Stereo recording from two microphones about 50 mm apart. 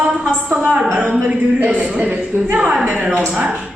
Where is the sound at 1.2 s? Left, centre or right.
Right.